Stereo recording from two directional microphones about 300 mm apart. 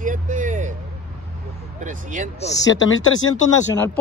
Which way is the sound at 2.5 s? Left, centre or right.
Left.